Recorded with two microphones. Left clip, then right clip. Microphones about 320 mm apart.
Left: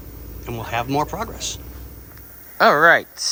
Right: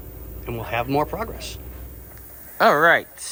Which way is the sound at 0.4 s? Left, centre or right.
Centre.